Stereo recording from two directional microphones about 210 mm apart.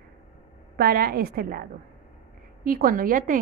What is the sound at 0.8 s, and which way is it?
A woman's voice, 45° right (ahead or behind).